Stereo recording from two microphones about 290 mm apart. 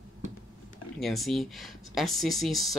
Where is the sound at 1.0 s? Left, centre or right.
Centre.